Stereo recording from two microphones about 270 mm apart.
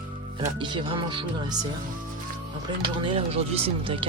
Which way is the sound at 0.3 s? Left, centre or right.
Centre.